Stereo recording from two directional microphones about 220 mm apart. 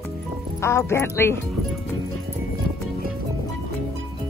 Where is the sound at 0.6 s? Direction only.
10° left (ahead or behind).